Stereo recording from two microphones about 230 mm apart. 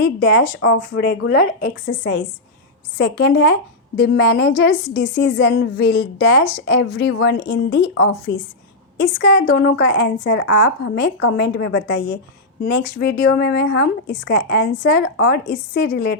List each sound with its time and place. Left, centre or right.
0.0 s a woman's voice: left